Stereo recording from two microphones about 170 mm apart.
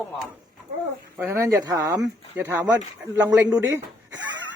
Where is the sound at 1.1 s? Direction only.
15° right (ahead or behind).